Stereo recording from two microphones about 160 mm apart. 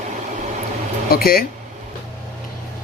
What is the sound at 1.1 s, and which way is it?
Speech, 65° left (ahead or behind).